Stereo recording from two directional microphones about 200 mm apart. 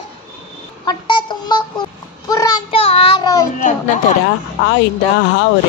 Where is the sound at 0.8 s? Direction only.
20° left (ahead or behind).